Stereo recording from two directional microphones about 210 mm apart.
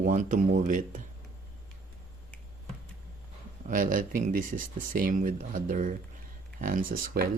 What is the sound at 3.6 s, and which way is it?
Speech, 40° right (ahead or behind).